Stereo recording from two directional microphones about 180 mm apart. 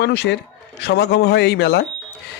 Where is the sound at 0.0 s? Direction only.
70° left (ahead or behind).